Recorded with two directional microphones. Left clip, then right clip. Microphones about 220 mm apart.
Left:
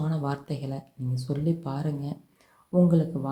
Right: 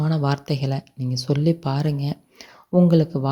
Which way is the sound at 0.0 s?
35° right (ahead or behind).